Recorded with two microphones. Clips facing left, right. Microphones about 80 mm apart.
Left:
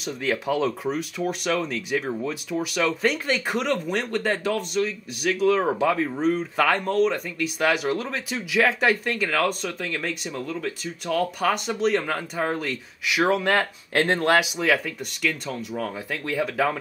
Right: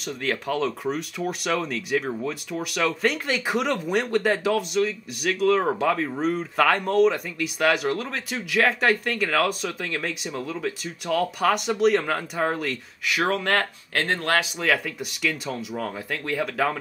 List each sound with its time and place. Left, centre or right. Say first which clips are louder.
0.0 s speech: left 2 dB; centre
13.9 s speech: left 4 dB; centre
14.4 s speech: left 1 dB; centre